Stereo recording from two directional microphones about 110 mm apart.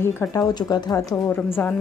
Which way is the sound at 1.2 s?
15° left (ahead or behind).